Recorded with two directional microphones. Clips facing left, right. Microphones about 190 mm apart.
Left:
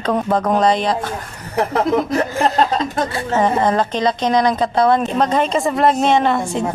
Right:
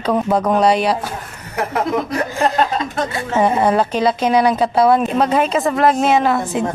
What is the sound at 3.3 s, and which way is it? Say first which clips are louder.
A woman's voice: right 1 dB; 10° right (ahead or behind).